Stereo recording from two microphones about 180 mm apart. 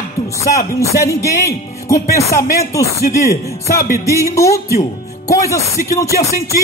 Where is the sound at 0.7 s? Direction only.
15° left (ahead or behind).